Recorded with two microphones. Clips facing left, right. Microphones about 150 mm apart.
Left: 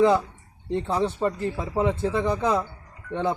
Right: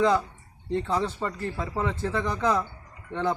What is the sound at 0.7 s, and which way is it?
Speech, 20° left (ahead or behind).